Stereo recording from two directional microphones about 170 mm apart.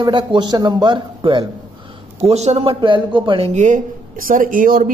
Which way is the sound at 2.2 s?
40° right (ahead or behind).